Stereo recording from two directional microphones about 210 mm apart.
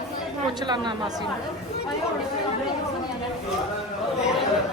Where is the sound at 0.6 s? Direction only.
20° right (ahead or behind).